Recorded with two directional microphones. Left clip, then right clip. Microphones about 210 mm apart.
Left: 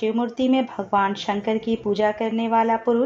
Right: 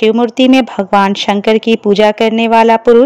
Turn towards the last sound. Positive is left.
turn(degrees=-40)  # may be behind; listen again after turning